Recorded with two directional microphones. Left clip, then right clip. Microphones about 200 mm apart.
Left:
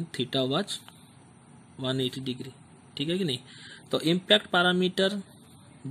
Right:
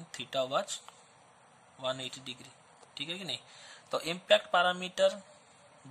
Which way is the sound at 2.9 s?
15° left (ahead or behind).